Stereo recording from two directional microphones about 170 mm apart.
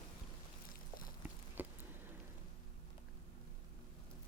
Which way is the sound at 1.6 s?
10° right (ahead or behind).